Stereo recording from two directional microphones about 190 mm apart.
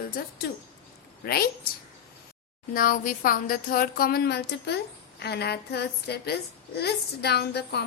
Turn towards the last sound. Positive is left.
turn(degrees=60)  # may be behind; listen again after turning